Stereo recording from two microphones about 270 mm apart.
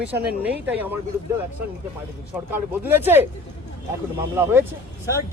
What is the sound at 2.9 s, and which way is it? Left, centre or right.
Speech, centre.